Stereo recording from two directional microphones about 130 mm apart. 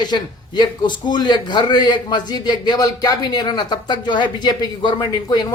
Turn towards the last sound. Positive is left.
turn(degrees=30)  # may be behind; listen again after turning